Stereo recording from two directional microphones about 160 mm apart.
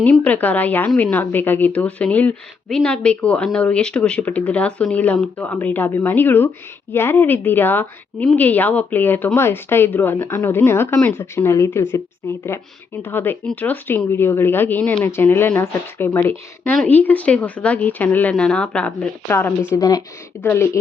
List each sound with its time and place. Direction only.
0.0 s a woman's voice: 10° left (ahead or behind)